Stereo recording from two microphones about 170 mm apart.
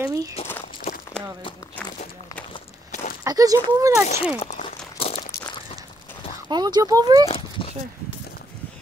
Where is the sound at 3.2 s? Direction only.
20° right (ahead or behind).